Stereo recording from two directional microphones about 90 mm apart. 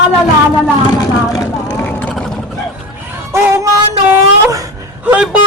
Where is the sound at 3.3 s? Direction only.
30° right (ahead or behind).